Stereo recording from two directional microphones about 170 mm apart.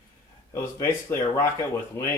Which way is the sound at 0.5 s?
15° left (ahead or behind).